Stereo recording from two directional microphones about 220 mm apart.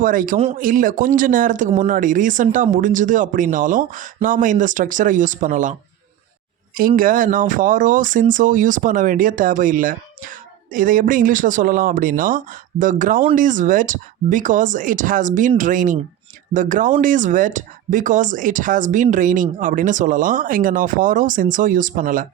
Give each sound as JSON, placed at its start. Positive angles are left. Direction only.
{"t": 0.0, "sound": "speech", "side_deg": -40}
{"t": 6.7, "sound": "speech", "side_deg": -40}